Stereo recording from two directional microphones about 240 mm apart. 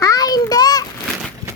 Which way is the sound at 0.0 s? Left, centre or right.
Centre.